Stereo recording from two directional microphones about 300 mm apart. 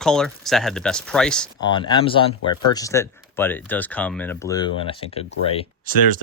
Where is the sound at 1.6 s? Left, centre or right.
Centre.